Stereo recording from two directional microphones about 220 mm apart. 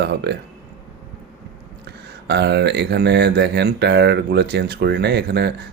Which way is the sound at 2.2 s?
50° right (ahead or behind).